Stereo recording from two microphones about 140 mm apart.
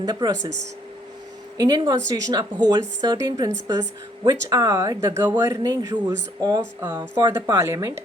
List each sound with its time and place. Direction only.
0.0 s a woman's voice: 30° right (ahead or behind)
1.5 s a woman's voice: 30° right (ahead or behind)